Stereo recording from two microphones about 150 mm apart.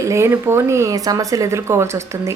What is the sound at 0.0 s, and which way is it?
Speech, 20° right (ahead or behind).